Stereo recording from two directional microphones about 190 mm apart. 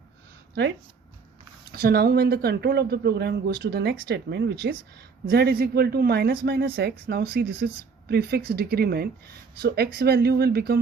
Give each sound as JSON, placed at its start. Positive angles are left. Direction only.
{"t": 1.7, "sound": "a woman's voice", "side_deg": -55}